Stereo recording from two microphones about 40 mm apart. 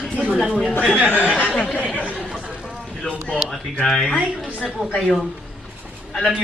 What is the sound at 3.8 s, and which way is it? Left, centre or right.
A man's voice, centre.